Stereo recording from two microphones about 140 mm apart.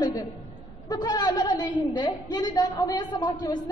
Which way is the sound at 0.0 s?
25° left (ahead or behind).